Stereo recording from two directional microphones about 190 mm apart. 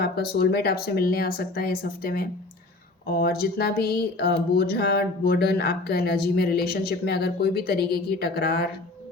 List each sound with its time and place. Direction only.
0.0 s speech: 55° left (ahead or behind)